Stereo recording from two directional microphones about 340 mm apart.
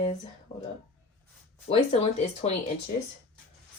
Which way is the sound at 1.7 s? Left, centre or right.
Centre.